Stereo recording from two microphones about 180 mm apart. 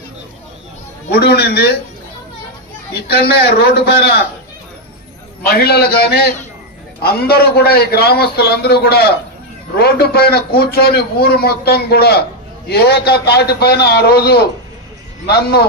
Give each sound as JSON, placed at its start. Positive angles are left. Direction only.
{"t": 1.1, "sound": "a man's voice", "side_deg": 65}
{"t": 3.1, "sound": "a man's voice", "side_deg": 60}
{"t": 5.5, "sound": "a man's voice", "side_deg": 60}